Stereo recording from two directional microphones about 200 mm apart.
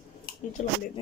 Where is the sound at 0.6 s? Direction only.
35° left (ahead or behind).